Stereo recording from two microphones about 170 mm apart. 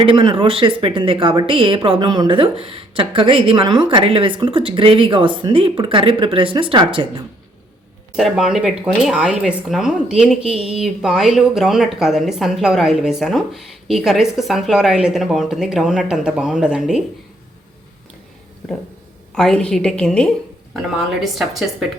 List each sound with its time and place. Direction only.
0.0 s a woman's voice: 30° right (ahead or behind)
8.1 s speech: 5° right (ahead or behind)
19.3 s speech: 5° left (ahead or behind)